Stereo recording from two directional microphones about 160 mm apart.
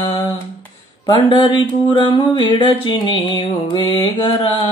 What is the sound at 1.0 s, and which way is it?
Speech, 30° left (ahead or behind).